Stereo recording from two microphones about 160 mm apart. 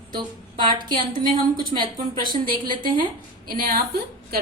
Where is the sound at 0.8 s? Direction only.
30° right (ahead or behind).